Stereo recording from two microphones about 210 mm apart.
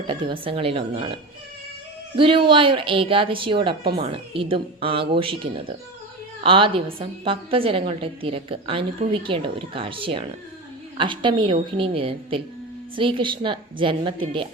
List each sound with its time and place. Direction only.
0.1 s a woman's voice: 20° right (ahead or behind)